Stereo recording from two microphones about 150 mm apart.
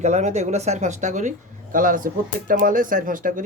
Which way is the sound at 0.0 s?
50° right (ahead or behind).